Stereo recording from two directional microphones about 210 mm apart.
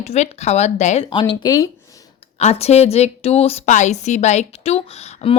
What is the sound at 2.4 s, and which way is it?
A woman's voice, 30° left (ahead or behind).